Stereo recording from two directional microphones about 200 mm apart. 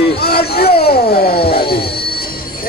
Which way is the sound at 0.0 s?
50° left (ahead or behind).